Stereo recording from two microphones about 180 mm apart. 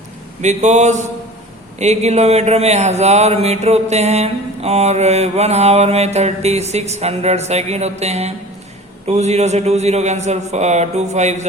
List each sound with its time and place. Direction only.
0.4 s mantra: 40° right (ahead or behind)